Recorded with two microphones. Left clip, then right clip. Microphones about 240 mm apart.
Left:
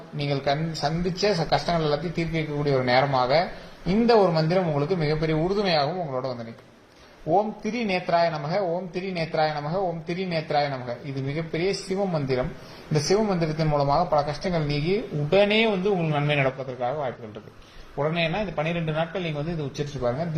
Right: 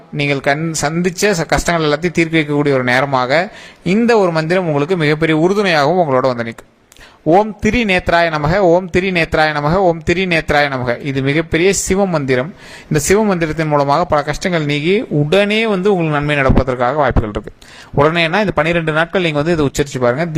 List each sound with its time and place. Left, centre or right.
0.3 s speech: right
7.6 s speech: right